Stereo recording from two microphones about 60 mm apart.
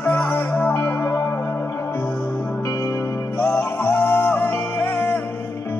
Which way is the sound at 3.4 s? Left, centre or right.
Left.